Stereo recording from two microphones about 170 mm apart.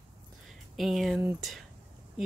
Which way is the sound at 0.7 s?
Centre (ahead or behind).